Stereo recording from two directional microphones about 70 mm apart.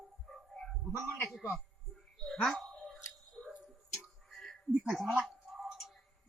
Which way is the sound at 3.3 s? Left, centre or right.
Centre.